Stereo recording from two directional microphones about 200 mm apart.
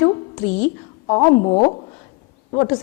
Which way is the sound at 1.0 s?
25° left (ahead or behind).